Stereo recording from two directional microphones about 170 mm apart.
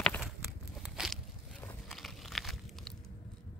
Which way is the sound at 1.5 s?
5° left (ahead or behind).